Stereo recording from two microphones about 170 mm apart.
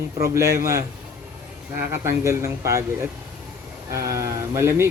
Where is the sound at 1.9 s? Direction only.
15° right (ahead or behind).